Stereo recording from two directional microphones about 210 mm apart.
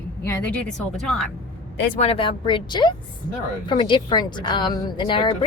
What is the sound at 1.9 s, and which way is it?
A woman's voice, 30° left (ahead or behind).